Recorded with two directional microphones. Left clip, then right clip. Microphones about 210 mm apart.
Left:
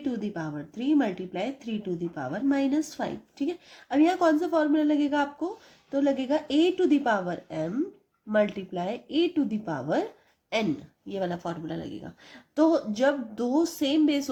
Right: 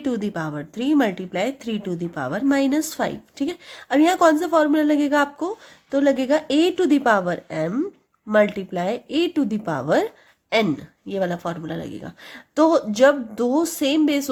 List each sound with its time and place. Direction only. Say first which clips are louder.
0.0 s a woman's voice: right 7 dB; 30° right (ahead or behind)
11.1 s speech: right 7 dB; 25° right (ahead or behind)